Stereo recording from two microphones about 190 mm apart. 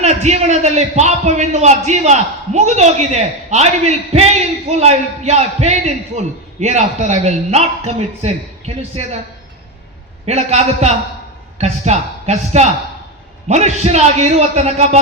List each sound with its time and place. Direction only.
0.0 s a man's voice: 35° right (ahead or behind)
10.2 s a man's voice: 35° right (ahead or behind)